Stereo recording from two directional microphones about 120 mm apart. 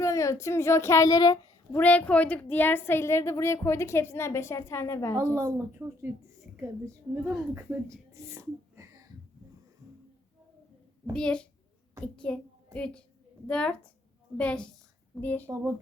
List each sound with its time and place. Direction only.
0.0 s a woman's voice: 25° left (ahead or behind)
1.7 s a woman's voice: 15° left (ahead or behind)
5.1 s speech: 25° right (ahead or behind)
7.5 s speech: 20° right (ahead or behind)
11.1 s a child's voice: 10° left (ahead or behind)